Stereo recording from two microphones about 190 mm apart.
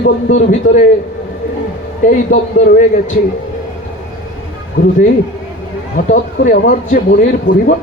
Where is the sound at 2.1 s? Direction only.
40° left (ahead or behind).